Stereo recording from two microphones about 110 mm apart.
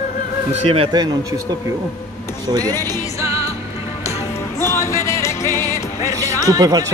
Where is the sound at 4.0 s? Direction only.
70° left (ahead or behind).